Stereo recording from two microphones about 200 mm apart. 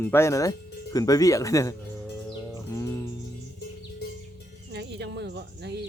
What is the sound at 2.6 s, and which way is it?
Music, 15° left (ahead or behind).